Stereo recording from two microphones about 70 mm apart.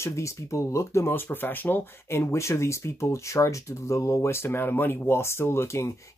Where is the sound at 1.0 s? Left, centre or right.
Left.